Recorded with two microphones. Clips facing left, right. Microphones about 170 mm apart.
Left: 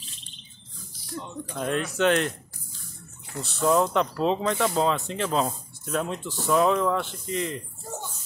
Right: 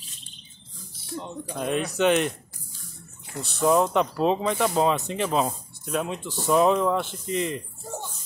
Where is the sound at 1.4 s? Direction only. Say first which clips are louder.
Right 1 dB; 10° right (ahead or behind).